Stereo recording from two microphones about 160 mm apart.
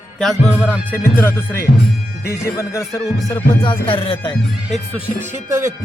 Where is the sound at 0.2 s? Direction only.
5° left (ahead or behind).